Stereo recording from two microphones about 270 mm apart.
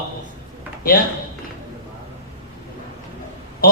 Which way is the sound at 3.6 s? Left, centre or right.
Left.